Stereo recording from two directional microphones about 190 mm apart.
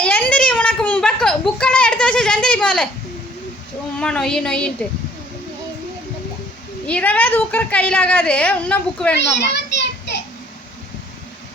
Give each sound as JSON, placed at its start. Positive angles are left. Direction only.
{"t": 0.0, "sound": "a sound", "side_deg": 10}
{"t": 3.9, "sound": "speech", "side_deg": 5}
{"t": 6.8, "sound": "a woman's voice", "side_deg": 5}
{"t": 9.1, "sound": "a child's voice", "side_deg": 65}